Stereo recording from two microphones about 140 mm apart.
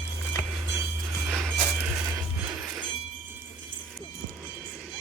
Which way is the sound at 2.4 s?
5° right (ahead or behind).